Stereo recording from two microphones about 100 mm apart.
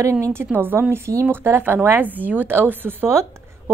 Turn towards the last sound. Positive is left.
turn(degrees=-25)  # may be behind; listen again after turning